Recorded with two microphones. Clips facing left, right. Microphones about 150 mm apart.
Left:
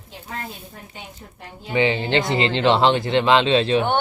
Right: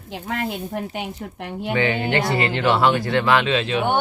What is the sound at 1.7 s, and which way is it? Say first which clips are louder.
Speech: left 2 dB; 20° left (ahead or behind).